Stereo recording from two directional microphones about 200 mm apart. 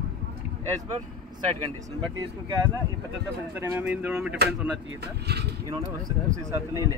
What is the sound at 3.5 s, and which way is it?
Speech, 10° right (ahead or behind).